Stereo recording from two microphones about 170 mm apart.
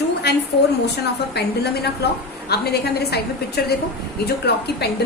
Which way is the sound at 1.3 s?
70° left (ahead or behind).